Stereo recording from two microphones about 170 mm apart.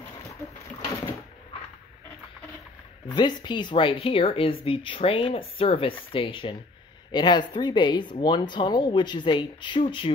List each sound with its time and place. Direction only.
3.1 s speech: 25° left (ahead or behind)